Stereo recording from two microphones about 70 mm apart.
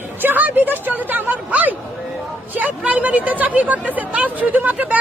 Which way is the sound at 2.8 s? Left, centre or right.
Centre.